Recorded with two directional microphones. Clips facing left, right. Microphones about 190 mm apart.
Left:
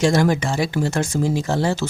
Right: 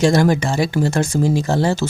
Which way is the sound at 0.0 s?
40° right (ahead or behind).